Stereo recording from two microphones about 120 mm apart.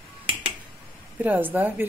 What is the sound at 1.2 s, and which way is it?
Speech, 15° right (ahead or behind).